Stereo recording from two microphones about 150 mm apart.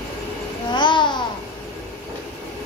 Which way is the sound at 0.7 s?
30° left (ahead or behind).